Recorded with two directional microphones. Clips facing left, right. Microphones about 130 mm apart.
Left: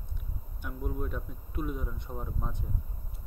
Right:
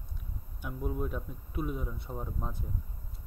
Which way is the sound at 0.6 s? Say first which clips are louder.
Right 1 dB; 5° right (ahead or behind).